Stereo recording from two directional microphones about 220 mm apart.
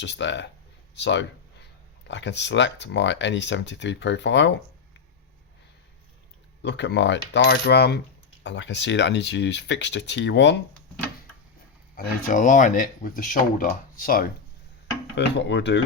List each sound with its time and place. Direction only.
0.0 s speech: 55° left (ahead or behind)
6.6 s speech: 55° left (ahead or behind)
11.9 s speech: 35° left (ahead or behind)
15.1 s speech: 55° left (ahead or behind)